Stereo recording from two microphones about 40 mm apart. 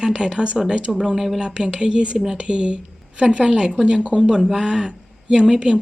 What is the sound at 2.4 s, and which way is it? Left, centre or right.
Speech, right.